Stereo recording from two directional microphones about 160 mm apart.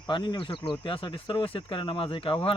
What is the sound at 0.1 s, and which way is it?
Speech, 30° left (ahead or behind).